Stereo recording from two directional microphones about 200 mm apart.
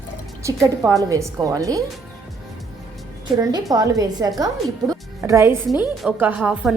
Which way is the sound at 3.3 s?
20° right (ahead or behind).